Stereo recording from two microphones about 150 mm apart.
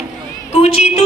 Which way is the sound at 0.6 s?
45° left (ahead or behind).